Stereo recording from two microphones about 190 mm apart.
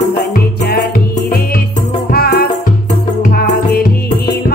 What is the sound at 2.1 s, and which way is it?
Music, 55° left (ahead or behind).